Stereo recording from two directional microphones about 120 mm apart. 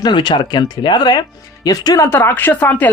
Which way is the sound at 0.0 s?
40° left (ahead or behind).